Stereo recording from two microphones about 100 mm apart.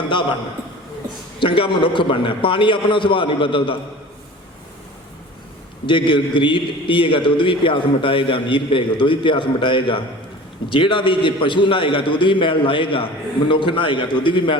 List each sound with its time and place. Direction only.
1.4 s a man's voice: 60° left (ahead or behind)
5.8 s a man's voice: 55° left (ahead or behind)